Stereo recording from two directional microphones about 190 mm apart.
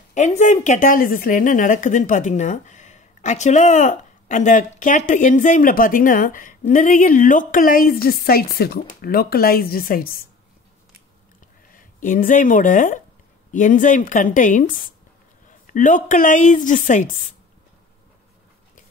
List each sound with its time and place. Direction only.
0.1 s a woman's voice: 40° left (ahead or behind)
11.7 s a woman's voice: 45° left (ahead or behind)